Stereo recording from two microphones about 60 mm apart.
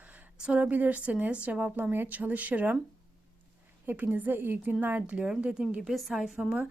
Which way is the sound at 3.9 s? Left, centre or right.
Right.